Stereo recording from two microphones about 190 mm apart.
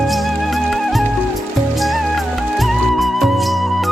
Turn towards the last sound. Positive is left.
turn(degrees=0)  # may be behind; listen again after turning